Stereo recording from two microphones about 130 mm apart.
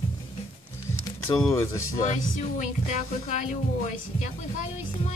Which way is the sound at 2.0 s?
70° left (ahead or behind).